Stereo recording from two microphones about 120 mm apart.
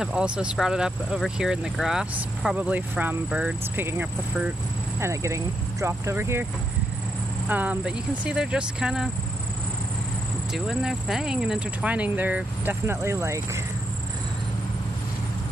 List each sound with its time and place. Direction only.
0.0 s speech: 5° right (ahead or behind)
3.8 s speech: 20° right (ahead or behind)
7.4 s speech: 15° right (ahead or behind)
10.5 s speech: 5° right (ahead or behind); by 13.4 s 25° right (ahead or behind)